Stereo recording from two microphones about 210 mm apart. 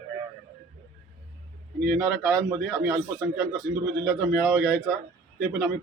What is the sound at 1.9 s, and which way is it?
A man's voice, 15° right (ahead or behind).